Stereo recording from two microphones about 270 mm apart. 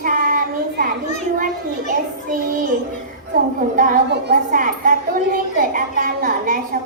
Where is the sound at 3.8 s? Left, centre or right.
Right.